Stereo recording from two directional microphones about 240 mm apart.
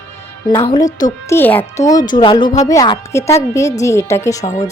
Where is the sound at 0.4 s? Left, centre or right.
Centre.